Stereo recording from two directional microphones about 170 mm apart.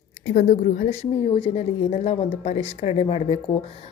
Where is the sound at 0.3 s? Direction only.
50° left (ahead or behind).